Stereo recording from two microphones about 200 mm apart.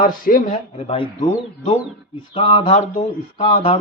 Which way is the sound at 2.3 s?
25° left (ahead or behind).